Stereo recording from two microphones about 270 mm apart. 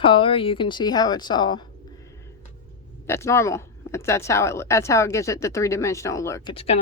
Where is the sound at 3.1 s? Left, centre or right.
Centre.